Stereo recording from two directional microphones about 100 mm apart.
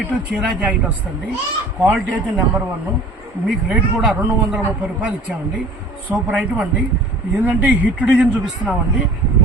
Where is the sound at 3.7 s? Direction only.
10° right (ahead or behind).